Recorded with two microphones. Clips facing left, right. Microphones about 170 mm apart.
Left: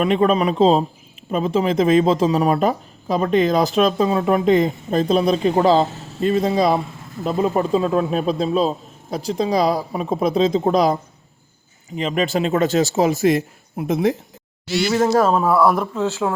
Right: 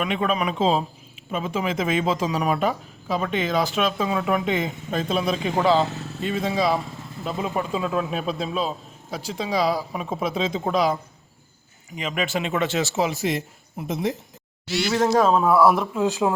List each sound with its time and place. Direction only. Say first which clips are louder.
0.0 s speech: left 7 dB; 35° left (ahead or behind)
11.9 s speech: left 6 dB; 35° left (ahead or behind); by 14.2 s 60° left (ahead or behind)
14.7 s speech: left 3 dB; 5° left (ahead or behind)
16.0 s speech: even; 15° right (ahead or behind)